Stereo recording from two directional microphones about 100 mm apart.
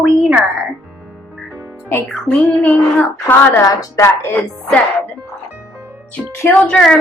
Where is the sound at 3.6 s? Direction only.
35° left (ahead or behind).